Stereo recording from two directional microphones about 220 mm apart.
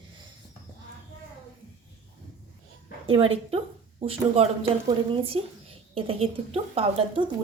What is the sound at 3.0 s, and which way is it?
A woman's voice, 25° right (ahead or behind).